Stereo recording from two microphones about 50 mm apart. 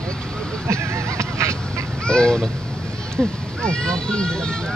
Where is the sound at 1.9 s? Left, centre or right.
Centre.